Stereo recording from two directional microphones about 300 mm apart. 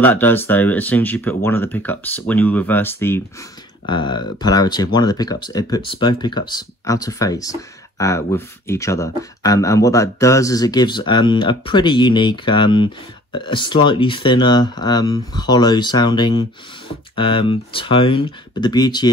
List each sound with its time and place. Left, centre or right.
0.0 s speech: centre